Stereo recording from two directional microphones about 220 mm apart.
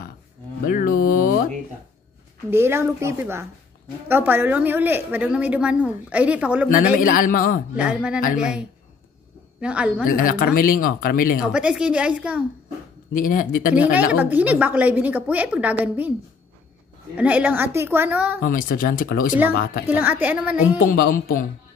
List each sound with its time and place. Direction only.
0.7 s mantra: 40° left (ahead or behind)
2.5 s a woman's voice: 10° right (ahead or behind)
7.0 s speech: 40° left (ahead or behind)
7.7 s a woman's voice: 5° right (ahead or behind)
10.0 s speech: 40° left (ahead or behind)
11.5 s a woman's voice: 5° right (ahead or behind)
13.1 s speech: 40° left (ahead or behind)
14.1 s a woman's voice: 5° right (ahead or behind)
17.2 s a woman's voice: 5° right (ahead or behind)
18.4 s speech: 40° left (ahead or behind)
19.9 s a woman's voice: 10° right (ahead or behind)
20.8 s speech: 40° left (ahead or behind)